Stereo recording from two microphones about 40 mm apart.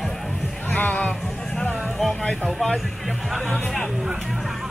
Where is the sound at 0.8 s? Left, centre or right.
Left.